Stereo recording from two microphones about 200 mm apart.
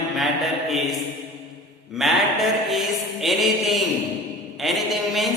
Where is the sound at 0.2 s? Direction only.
Centre (ahead or behind).